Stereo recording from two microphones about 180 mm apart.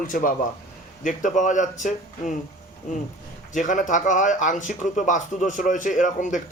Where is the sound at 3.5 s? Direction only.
45° left (ahead or behind).